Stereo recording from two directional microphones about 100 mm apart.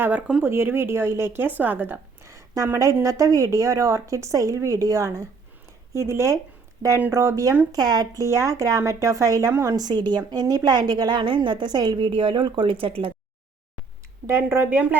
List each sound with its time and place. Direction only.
0.0 s speech: 15° right (ahead or behind)
0.4 s a woman's voice: 25° right (ahead or behind); by 13.1 s 65° right (ahead or behind)
14.3 s speech: 25° right (ahead or behind)